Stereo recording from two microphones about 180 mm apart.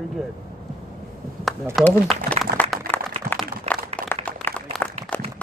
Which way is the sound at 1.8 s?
Centre (ahead or behind).